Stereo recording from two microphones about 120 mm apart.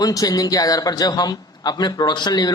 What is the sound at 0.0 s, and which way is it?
A man's voice, 30° left (ahead or behind).